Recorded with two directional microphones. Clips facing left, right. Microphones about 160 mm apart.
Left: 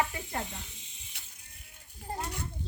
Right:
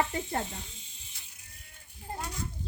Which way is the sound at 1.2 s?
70° left (ahead or behind).